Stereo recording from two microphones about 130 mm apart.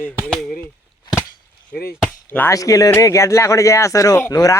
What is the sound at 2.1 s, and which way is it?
Chop, 15° left (ahead or behind).